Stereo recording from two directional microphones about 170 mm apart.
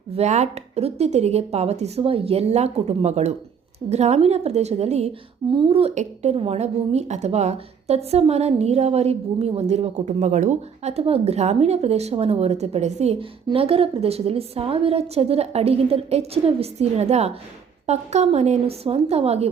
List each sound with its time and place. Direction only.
0.2 s a woman's voice: 40° right (ahead or behind)